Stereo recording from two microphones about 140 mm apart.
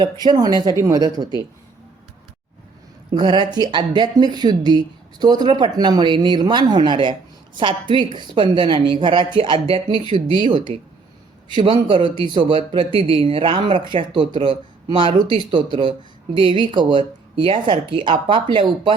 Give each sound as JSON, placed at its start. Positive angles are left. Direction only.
{"t": 0.0, "sound": "speech", "side_deg": -30}
{"t": 3.2, "sound": "speech", "side_deg": -30}